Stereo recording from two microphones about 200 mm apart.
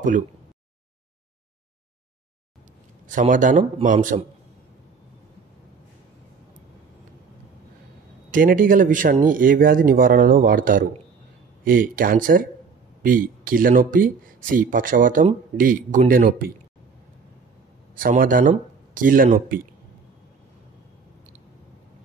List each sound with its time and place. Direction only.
3.1 s a man's voice: 40° right (ahead or behind)
8.3 s speech: 45° right (ahead or behind)
17.9 s speech: 45° right (ahead or behind)